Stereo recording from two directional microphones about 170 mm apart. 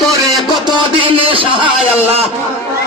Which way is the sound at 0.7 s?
30° right (ahead or behind).